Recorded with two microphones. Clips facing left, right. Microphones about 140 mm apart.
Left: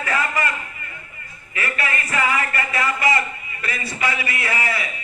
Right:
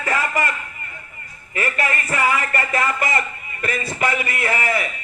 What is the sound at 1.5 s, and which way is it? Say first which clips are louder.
A man's voice: right 3 dB; 40° right (ahead or behind).